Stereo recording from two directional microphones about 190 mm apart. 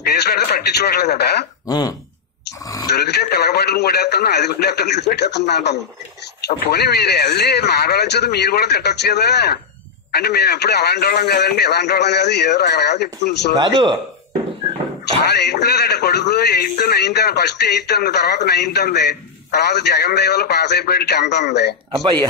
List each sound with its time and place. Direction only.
0.1 s a man's voice: 55° left (ahead or behind)
1.7 s speech: 20° left (ahead or behind)
2.6 s a sound: 20° left (ahead or behind)
2.9 s a man's voice: 60° left (ahead or behind)
13.6 s a man's voice: 20° right (ahead or behind)
15.3 s a man's voice: 60° left (ahead or behind)